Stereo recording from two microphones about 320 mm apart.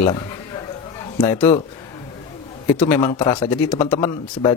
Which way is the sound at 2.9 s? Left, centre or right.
Centre.